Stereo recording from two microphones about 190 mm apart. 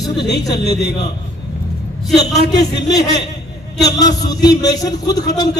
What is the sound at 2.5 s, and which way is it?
A man's voice, 20° left (ahead or behind).